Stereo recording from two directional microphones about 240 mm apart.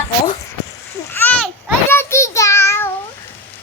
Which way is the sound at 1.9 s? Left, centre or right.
Centre.